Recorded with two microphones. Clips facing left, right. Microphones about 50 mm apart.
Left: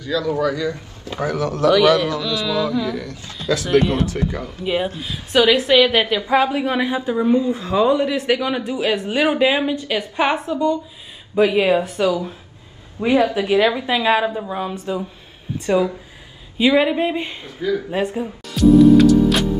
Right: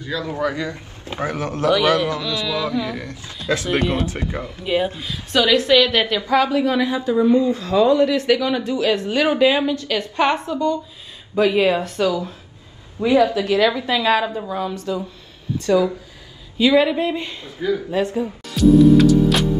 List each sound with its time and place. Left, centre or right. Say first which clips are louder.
0.0 s speech: left 3 dB; right
5.0 s a woman's voice: left 3 dB; centre
12.1 s a woman's voice: left 2 dB; left
18.5 s music: left 1 dB; centre